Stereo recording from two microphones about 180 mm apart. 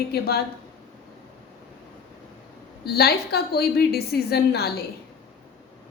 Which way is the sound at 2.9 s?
60° left (ahead or behind).